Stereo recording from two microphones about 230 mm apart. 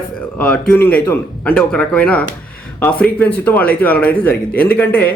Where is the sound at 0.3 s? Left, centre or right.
Centre.